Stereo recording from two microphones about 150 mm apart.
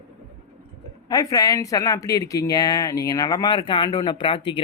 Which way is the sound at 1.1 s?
25° left (ahead or behind).